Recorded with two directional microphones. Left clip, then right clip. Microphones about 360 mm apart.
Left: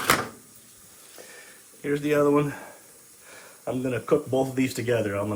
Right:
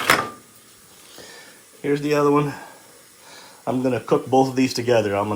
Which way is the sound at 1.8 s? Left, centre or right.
Centre.